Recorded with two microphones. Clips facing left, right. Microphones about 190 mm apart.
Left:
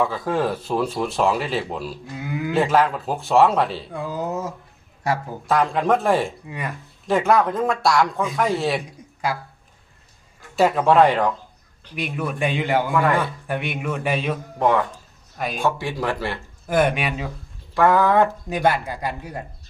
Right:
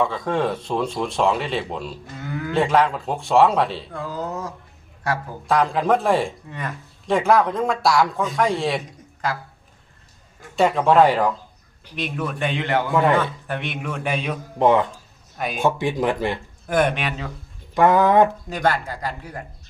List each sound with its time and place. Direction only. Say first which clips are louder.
0.0 s speech: even; 5° left (ahead or behind)
3.9 s speech: left 2 dB; 15° left (ahead or behind)
5.5 s speech: even; centre (ahead or behind)
10.5 s speech: even; 5° left (ahead or behind)
11.9 s speech: left 1 dB; 10° left (ahead or behind)
12.9 s a man's voice: right 5 dB; 20° right (ahead or behind)
13.5 s speech: left 2 dB; 10° left (ahead or behind)
14.6 s a man's voice: right 3 dB; 20° right (ahead or behind)
15.4 s speech: even; centre (ahead or behind)
15.6 s speech: right 4 dB; 20° right (ahead or behind)
16.6 s speech: left 1 dB; 5° left (ahead or behind)
17.7 s speech: right 1 dB; 20° right (ahead or behind)
18.4 s speech: left 2 dB; 15° left (ahead or behind)